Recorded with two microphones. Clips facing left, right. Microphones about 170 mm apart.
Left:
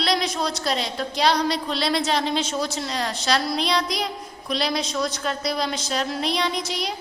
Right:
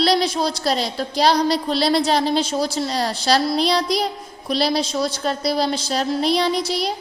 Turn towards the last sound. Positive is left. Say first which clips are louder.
# right 5 dB
turn(degrees=-35)  # may be behind; listen again after turning